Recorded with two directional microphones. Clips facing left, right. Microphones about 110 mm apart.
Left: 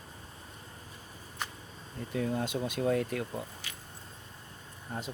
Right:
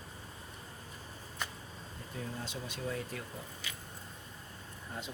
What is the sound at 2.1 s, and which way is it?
Speech, 65° left (ahead or behind).